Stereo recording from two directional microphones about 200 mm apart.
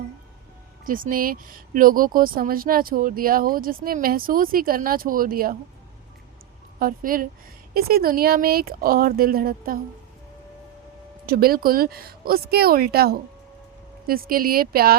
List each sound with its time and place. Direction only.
0.9 s speech: 45° right (ahead or behind)
6.7 s speech: 45° right (ahead or behind)
11.3 s speech: 50° right (ahead or behind)